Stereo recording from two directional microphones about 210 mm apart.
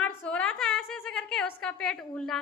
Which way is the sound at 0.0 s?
5° left (ahead or behind).